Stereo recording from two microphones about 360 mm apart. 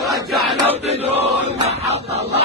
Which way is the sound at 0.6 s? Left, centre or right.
Centre.